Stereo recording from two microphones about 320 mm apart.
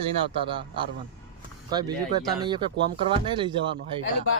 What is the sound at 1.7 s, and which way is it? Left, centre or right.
Speech, centre.